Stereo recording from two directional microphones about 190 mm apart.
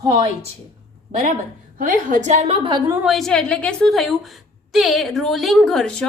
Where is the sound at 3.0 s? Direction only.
Centre (ahead or behind).